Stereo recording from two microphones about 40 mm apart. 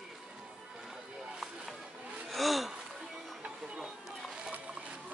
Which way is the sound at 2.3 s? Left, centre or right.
Centre.